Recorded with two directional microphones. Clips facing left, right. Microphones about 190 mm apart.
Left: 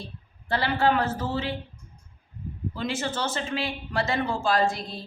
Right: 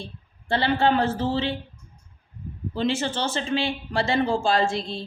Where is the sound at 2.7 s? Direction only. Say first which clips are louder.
Right 5 dB; 30° right (ahead or behind).